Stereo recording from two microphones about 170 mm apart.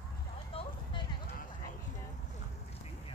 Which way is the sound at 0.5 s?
35° left (ahead or behind).